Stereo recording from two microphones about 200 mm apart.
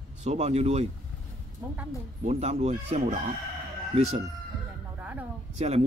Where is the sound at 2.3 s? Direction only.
30° right (ahead or behind).